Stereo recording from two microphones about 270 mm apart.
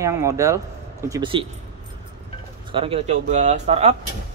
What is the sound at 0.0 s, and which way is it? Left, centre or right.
Speech, centre.